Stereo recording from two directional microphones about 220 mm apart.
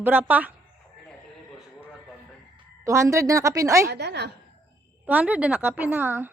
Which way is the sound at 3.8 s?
50° right (ahead or behind).